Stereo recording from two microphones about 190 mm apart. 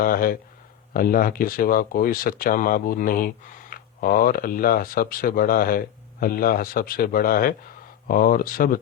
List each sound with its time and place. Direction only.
0.0 s speech: 50° left (ahead or behind)